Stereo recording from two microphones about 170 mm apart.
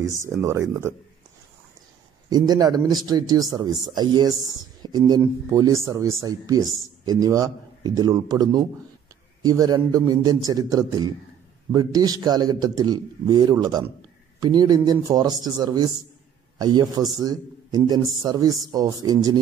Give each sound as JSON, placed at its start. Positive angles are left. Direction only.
{"t": 0.4, "sound": "speech", "side_deg": -15}
{"t": 2.2, "sound": "speech", "side_deg": -25}